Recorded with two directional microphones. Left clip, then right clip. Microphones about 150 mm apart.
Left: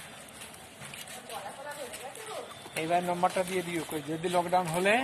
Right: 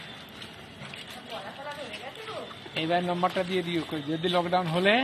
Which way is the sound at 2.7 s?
5° right (ahead or behind).